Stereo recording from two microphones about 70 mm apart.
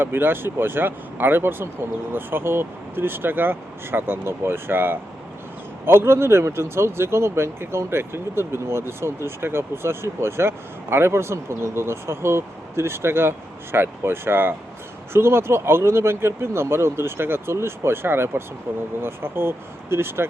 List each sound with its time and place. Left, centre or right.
0.0 s speech: right